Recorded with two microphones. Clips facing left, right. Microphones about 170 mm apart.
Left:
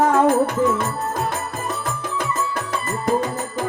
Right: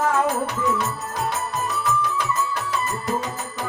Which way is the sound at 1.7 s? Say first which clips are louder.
Right 4 dB; 50° left (ahead or behind).